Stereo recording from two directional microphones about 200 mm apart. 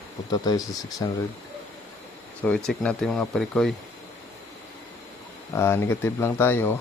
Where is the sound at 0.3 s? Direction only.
20° left (ahead or behind).